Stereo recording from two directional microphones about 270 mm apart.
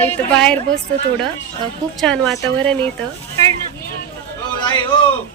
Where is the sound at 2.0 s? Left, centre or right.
Centre.